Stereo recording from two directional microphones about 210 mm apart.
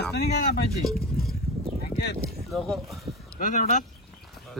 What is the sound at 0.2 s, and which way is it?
Speech, 50° left (ahead or behind).